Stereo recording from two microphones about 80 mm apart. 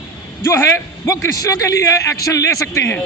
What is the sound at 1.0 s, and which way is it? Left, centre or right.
Speech, left.